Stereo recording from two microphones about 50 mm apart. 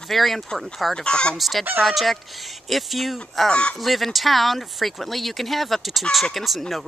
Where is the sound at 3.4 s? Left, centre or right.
Centre.